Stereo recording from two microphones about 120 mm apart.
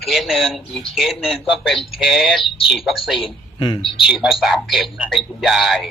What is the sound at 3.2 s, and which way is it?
Speech, 45° left (ahead or behind).